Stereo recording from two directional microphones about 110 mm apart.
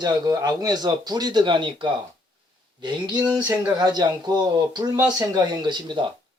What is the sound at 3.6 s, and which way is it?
Speech, 40° right (ahead or behind).